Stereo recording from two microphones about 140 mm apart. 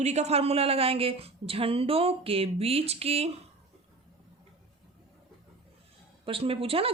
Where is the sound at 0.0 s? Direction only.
55° right (ahead or behind).